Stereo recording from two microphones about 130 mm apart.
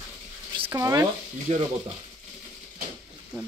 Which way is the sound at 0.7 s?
25° right (ahead or behind).